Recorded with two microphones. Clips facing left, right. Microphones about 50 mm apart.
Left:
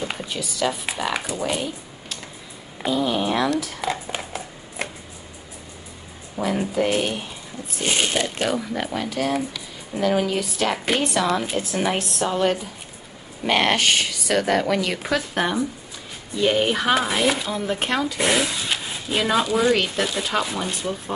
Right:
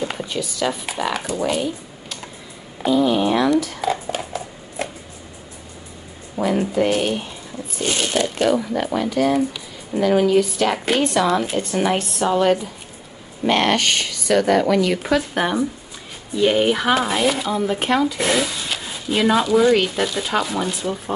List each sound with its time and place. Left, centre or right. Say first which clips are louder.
0.2 s speech: right 2 dB; centre
2.8 s a sound: right 5 dB; centre
3.5 s speech: right 5 dB; centre
3.9 s a sound: right 4 dB; centre
6.3 s speech: right 3 dB; centre
8.1 s speech: right 5 dB; centre
15.0 s speech: right 3 dB; centre
18.2 s speech: right 1 dB; centre
19.1 s speech: right 4 dB; centre